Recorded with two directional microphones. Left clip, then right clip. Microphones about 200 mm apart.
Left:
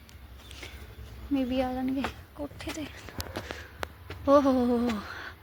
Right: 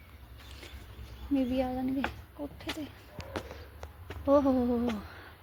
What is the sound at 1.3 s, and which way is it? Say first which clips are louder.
Speech: left 2 dB; 10° right (ahead or behind).